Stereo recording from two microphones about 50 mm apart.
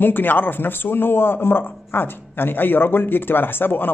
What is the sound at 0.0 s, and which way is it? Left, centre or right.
A man's voice, left.